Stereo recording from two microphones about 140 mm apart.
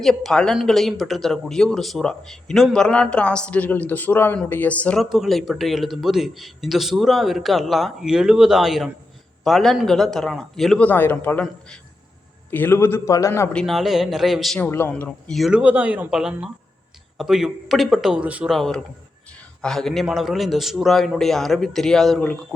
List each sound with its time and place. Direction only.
0.0 s speech: centre (ahead or behind)
5.0 s a man's voice: 5° right (ahead or behind); by 13.5 s 20° left (ahead or behind)
13.5 s speech: 5° left (ahead or behind)
14.7 s a man's voice: 15° left (ahead or behind)
15.3 s speech: centre (ahead or behind)
18.5 s speech: centre (ahead or behind)